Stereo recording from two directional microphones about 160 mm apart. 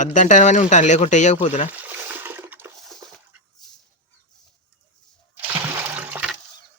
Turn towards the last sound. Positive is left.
turn(degrees=-10)  # may be behind; listen again after turning